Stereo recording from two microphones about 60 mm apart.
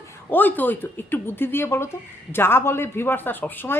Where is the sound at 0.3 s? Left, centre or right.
Left.